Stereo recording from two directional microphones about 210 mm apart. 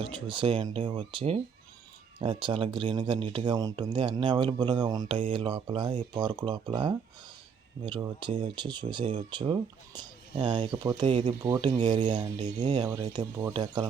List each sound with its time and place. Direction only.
0.0 s speech: 25° right (ahead or behind)